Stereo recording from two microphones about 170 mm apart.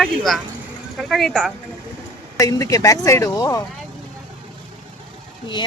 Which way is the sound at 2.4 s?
20° left (ahead or behind).